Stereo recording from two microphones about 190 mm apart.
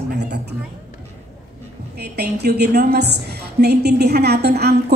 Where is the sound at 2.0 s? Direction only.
60° right (ahead or behind).